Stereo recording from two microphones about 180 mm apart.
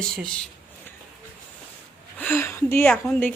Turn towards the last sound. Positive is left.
turn(degrees=5)  # may be behind; listen again after turning